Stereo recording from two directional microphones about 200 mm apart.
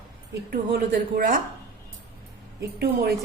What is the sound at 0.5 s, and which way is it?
Speech, 50° right (ahead or behind).